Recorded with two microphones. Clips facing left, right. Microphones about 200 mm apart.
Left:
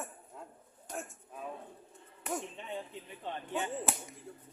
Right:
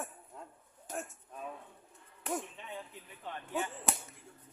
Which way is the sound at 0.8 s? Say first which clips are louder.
Right 1 dB; centre (ahead or behind).